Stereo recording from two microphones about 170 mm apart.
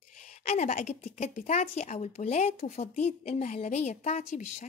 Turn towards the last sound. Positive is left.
turn(degrees=40)  # may be behind; listen again after turning